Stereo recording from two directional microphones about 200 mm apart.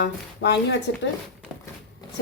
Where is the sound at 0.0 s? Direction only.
60° left (ahead or behind).